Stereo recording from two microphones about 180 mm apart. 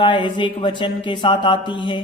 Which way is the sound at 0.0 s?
25° left (ahead or behind).